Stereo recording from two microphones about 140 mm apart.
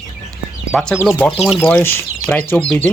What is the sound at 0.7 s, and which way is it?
Speech, 5° left (ahead or behind).